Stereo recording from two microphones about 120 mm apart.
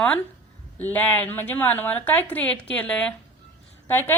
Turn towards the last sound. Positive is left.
turn(degrees=20)  # may be behind; listen again after turning